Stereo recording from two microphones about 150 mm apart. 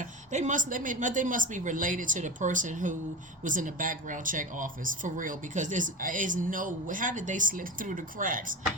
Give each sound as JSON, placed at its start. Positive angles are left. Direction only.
{"t": 0.0, "sound": "speech", "side_deg": -55}